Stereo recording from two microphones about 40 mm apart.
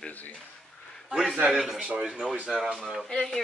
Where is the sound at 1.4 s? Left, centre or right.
Centre.